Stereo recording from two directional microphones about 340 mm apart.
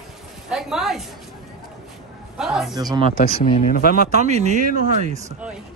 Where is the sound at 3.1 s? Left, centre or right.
Left.